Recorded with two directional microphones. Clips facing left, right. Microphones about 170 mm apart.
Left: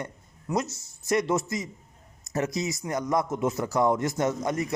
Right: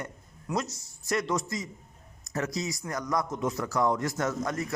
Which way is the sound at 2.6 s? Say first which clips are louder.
Left 4 dB; 20° left (ahead or behind).